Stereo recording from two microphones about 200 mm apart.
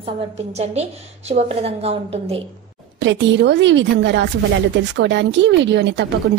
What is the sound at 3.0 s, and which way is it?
A woman's voice, 65° right (ahead or behind).